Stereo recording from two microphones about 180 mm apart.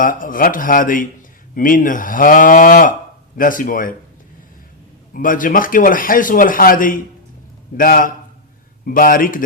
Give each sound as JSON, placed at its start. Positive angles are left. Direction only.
{"t": 0.0, "sound": "speech", "side_deg": 50}
{"t": 5.1, "sound": "speech", "side_deg": 50}